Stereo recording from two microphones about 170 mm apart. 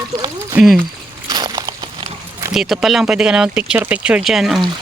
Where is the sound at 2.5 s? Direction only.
Centre (ahead or behind).